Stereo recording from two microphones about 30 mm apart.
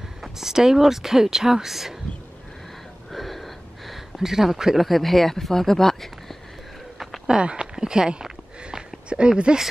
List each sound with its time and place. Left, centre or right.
0.2 s speech: centre
3.1 s a sound: centre
4.2 s speech: centre
4.7 s speech: centre
7.2 s speech: right
7.7 s a sound: right
9.1 s speech: right
9.5 s speech: right